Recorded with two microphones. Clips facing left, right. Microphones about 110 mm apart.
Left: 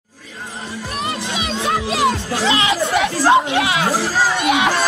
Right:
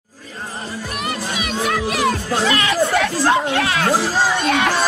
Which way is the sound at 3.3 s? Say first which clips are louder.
Left 6 dB; 25° left (ahead or behind).